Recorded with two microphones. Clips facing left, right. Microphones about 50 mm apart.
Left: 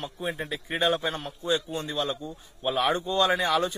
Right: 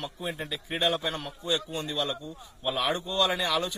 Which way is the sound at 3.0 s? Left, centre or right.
Left.